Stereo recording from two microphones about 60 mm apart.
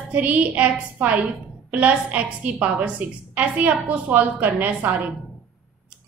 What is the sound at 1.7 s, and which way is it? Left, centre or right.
A woman's voice, right.